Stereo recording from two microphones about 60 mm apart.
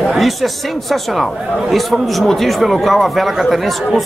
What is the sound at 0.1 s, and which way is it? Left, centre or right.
Speech, centre.